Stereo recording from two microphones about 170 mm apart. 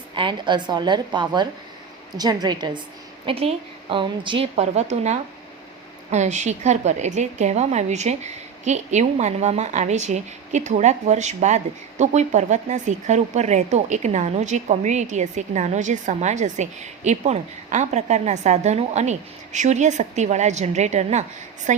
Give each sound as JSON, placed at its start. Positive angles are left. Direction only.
{"t": 0.1, "sound": "a woman's voice", "side_deg": -30}